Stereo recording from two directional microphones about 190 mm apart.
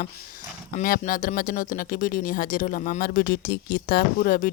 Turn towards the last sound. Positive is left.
turn(degrees=50)  # may be behind; listen again after turning